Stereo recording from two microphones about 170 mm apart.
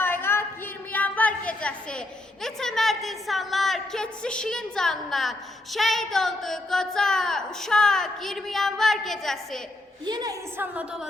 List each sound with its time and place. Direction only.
0.0 s a sound: 15° left (ahead or behind)
10.1 s a woman's voice: 25° right (ahead or behind)
10.6 s speech: 10° right (ahead or behind)